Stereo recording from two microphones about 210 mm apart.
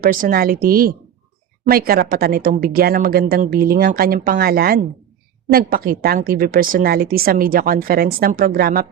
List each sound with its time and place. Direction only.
0.0 s a woman's voice: 40° right (ahead or behind)